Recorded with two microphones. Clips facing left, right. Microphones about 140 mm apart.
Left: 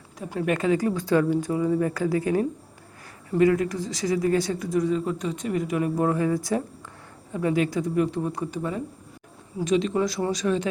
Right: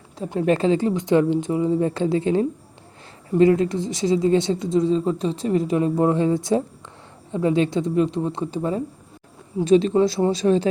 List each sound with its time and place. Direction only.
0.2 s a woman's voice: 30° right (ahead or behind)